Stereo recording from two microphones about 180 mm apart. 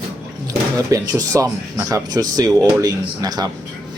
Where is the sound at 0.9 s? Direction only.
20° right (ahead or behind).